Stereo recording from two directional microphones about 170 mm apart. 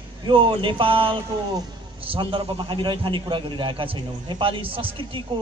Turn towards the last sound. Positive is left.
turn(degrees=-30)  # may be behind; listen again after turning